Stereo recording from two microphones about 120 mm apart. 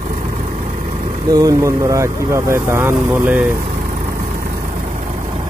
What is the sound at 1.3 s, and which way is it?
Speech, 30° right (ahead or behind).